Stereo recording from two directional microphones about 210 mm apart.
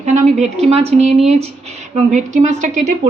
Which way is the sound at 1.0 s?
Centre (ahead or behind).